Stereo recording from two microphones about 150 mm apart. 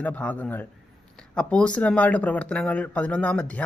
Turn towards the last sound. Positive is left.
turn(degrees=10)  # may be behind; listen again after turning